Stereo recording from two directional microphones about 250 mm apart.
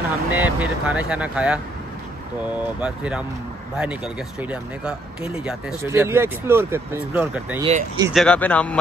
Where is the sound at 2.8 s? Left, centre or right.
Centre.